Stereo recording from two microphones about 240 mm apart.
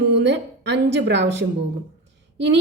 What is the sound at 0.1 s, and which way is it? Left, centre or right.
A woman's voice, right.